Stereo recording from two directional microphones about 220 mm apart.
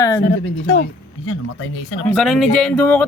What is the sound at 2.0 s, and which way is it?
Speech, centre (ahead or behind).